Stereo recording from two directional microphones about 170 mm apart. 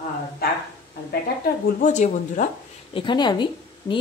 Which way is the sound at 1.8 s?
45° left (ahead or behind).